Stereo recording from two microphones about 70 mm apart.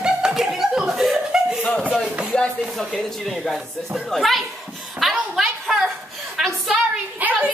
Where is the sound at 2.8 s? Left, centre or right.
Centre.